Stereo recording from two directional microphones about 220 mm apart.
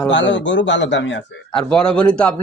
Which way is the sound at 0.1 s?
55° left (ahead or behind).